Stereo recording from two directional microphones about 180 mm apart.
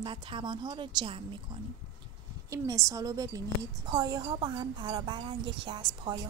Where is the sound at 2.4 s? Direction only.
20° right (ahead or behind).